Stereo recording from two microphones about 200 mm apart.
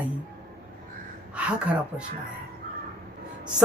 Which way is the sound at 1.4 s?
5° right (ahead or behind).